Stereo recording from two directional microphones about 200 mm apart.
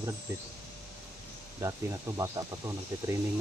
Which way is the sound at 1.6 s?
15° right (ahead or behind).